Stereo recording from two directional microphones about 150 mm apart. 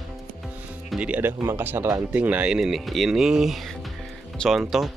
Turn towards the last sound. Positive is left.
turn(degrees=0)  # may be behind; listen again after turning